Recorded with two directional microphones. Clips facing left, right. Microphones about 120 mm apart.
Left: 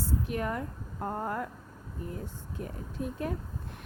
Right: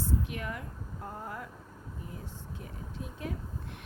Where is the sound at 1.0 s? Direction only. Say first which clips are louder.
Left 8 dB; 55° left (ahead or behind).